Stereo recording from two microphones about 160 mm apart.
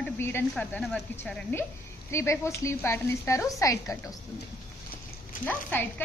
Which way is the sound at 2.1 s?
15° left (ahead or behind).